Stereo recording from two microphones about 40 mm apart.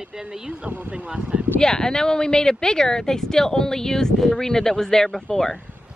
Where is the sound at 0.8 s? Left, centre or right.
Right.